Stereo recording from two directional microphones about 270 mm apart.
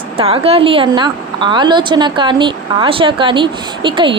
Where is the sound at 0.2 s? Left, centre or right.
Right.